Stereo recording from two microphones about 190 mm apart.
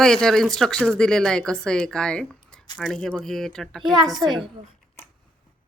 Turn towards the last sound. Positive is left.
turn(degrees=-20)  # may be behind; listen again after turning